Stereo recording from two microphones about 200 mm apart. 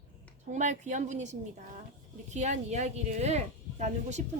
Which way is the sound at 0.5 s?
35° right (ahead or behind).